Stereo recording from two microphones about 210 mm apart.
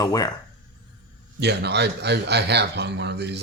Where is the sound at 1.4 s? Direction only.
50° right (ahead or behind).